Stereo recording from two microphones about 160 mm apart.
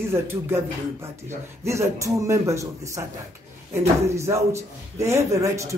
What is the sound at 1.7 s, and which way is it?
A man's voice, 20° right (ahead or behind).